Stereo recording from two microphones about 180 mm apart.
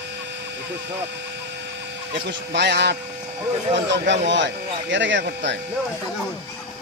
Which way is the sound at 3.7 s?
80° right.